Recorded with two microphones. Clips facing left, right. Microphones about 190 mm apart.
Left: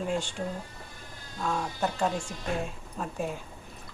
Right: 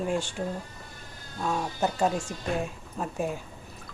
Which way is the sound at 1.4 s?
10° right (ahead or behind).